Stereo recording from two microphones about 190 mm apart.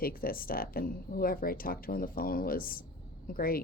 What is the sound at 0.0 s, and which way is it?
Speech, 50° left (ahead or behind).